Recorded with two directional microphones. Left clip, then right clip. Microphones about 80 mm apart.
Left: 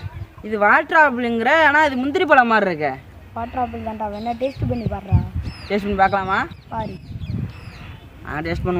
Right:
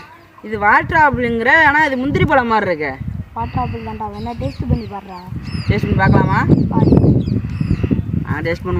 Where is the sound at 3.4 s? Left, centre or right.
Left.